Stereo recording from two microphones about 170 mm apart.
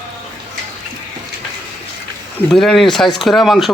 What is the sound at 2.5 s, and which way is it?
Speech, centre (ahead or behind).